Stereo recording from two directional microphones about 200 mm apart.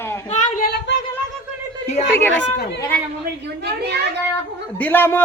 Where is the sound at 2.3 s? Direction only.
60° left (ahead or behind).